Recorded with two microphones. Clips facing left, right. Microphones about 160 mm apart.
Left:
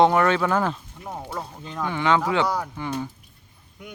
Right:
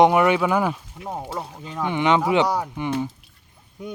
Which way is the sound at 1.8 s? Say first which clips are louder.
Right 2 dB; 20° right (ahead or behind).